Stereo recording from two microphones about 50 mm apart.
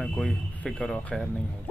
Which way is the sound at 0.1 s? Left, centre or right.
Left.